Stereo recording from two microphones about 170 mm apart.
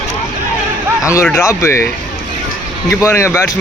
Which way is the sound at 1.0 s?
15° left (ahead or behind).